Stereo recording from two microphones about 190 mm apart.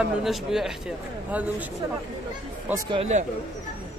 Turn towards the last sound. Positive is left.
turn(degrees=-35)  # may be behind; listen again after turning